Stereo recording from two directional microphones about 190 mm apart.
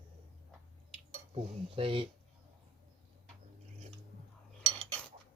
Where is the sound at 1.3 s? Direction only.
30° right (ahead or behind).